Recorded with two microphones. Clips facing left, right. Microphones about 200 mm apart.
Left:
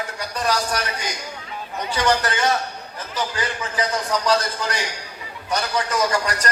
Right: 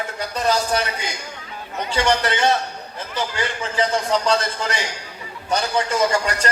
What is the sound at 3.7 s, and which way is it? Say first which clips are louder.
A man's voice: right 4 dB; 25° right (ahead or behind).